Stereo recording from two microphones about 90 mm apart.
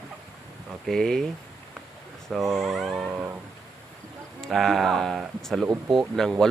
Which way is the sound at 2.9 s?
20° right (ahead or behind).